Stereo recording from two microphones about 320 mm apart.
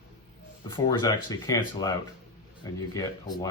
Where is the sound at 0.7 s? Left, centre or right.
Centre.